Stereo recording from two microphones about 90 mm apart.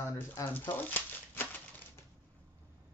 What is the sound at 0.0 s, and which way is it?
Typewriter, 25° left (ahead or behind).